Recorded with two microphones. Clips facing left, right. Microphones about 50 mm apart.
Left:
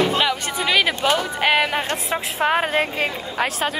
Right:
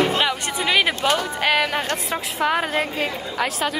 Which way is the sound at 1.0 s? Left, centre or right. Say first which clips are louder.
Left 1 dB; centre.